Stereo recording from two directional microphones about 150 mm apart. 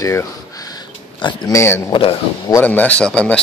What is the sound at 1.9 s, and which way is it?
Speech, 40° left (ahead or behind).